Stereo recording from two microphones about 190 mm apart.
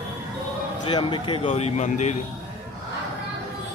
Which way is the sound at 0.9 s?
25° left (ahead or behind).